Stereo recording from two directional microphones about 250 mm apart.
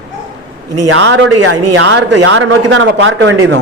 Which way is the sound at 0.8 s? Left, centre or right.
Right.